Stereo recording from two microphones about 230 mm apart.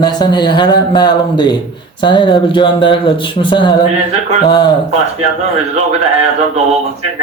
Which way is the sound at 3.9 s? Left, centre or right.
Right.